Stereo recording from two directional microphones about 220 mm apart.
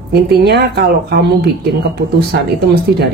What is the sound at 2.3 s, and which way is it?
Speech, 45° right (ahead or behind).